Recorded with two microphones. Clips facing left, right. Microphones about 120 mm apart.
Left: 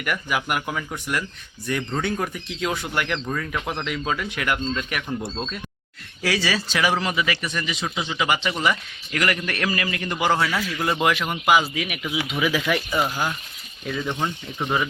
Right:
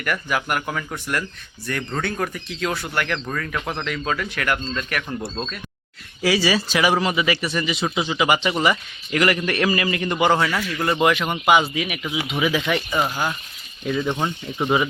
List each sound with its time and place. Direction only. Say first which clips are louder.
0.0 s speech: right 1 dB; 15° left (ahead or behind)
6.2 s speech: right 4 dB; 10° right (ahead or behind)
10.2 s speech: right 2 dB; 5° left (ahead or behind)
12.9 s speech: right 1 dB; 10° right (ahead or behind)